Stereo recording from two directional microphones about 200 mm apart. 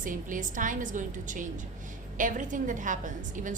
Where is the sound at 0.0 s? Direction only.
40° right (ahead or behind).